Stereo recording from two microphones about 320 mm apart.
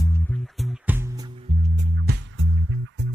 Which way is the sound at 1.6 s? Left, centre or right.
Right.